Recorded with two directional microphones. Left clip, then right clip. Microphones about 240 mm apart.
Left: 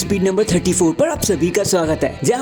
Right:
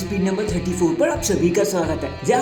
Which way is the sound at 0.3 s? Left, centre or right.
Left.